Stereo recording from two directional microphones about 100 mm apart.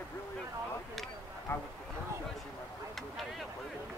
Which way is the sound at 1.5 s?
25° left (ahead or behind).